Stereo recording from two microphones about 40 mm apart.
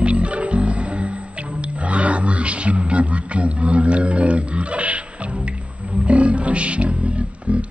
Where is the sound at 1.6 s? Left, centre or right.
Right.